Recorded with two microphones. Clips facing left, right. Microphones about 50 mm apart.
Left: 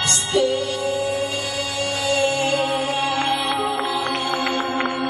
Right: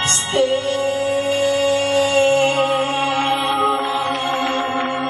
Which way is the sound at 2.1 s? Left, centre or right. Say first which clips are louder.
Right 3 dB; right.